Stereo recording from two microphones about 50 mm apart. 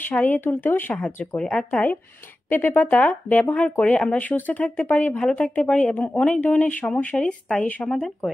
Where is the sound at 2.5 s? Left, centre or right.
Left.